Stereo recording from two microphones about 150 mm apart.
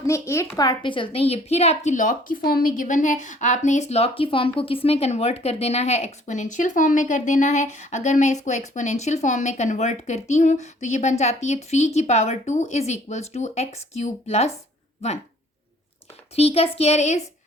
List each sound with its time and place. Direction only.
0.0 s a woman's voice: 20° left (ahead or behind); by 14.5 s 45° left (ahead or behind)
16.3 s a woman's voice: 40° left (ahead or behind)